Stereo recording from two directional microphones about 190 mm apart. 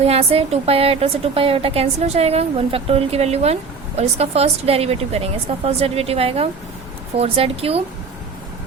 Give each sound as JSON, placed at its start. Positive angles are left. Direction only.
{"t": 0.0, "sound": "a woman's voice", "side_deg": -30}